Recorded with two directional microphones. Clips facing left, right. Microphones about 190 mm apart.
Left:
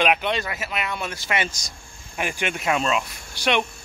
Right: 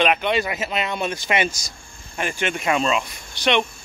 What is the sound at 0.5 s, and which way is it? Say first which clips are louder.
Speech: right 4 dB; 25° right (ahead or behind).